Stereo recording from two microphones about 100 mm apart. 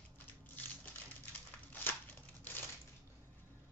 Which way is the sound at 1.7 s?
20° left (ahead or behind).